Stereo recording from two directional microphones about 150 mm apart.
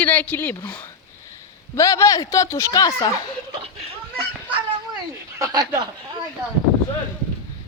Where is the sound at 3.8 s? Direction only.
40° right (ahead or behind).